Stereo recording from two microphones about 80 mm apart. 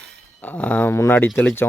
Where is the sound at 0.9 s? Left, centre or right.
Left.